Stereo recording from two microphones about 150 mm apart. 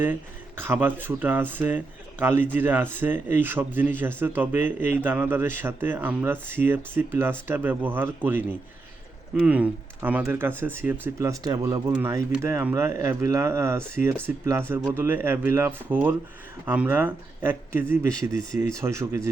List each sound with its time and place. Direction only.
0.0 s speech: 15° right (ahead or behind)
14.3 s speech: 5° right (ahead or behind)